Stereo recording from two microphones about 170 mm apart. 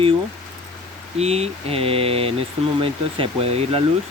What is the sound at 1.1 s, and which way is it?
Speech, 40° right (ahead or behind).